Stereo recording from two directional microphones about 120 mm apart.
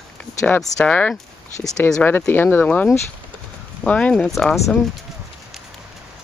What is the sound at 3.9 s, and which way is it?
Speech, 10° left (ahead or behind).